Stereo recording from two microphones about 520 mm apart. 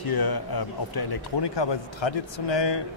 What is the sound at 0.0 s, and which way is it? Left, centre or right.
A man's voice, left.